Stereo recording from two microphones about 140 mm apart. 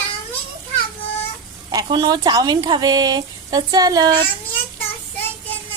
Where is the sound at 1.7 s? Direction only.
30° right (ahead or behind).